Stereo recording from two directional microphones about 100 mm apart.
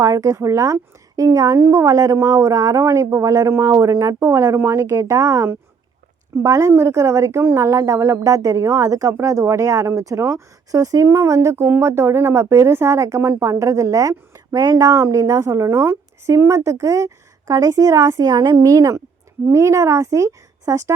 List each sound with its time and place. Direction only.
0.0 s speech: 35° right (ahead or behind)
4.2 s speech: 20° right (ahead or behind)